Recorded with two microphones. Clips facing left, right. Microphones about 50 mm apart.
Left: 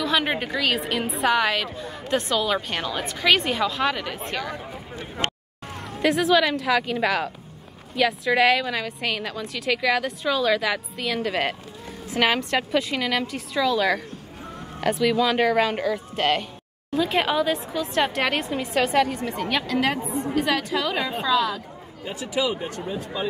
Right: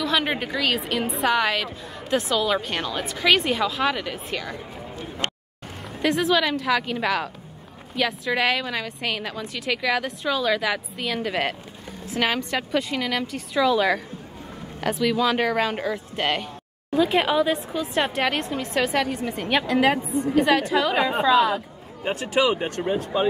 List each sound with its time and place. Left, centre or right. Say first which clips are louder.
0.0 s a woman's voice: even; centre
5.9 s a woman's voice: left 1 dB; centre
22.0 s speech: right 4 dB; right